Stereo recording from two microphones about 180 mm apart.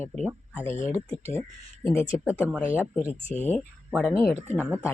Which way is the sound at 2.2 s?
5° right (ahead or behind).